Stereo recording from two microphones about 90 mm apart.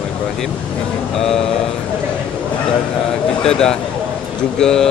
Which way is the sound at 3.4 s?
10° left (ahead or behind).